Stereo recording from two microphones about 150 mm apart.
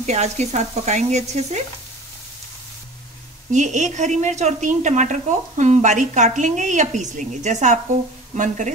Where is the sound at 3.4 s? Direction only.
55° right (ahead or behind).